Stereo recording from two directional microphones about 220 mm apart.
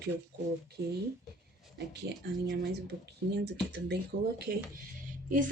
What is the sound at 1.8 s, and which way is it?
A woman's voice, 50° right (ahead or behind).